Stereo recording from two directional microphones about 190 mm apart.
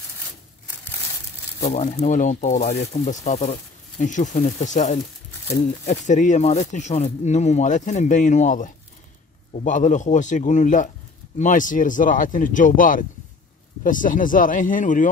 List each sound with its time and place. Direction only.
1.6 s speech: 35° left (ahead or behind)